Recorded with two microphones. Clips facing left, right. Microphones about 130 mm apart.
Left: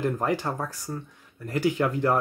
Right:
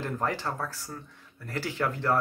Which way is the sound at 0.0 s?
15° left (ahead or behind).